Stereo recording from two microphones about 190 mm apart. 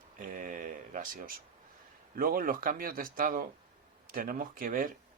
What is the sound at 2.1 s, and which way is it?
Speech, 50° right (ahead or behind).